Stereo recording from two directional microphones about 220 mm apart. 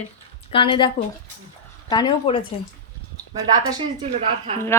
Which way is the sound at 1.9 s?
20° left (ahead or behind).